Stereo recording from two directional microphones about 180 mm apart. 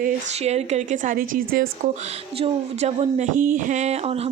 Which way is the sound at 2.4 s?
35° right (ahead or behind).